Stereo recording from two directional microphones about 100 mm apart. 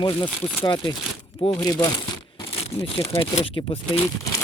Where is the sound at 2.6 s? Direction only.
80° left.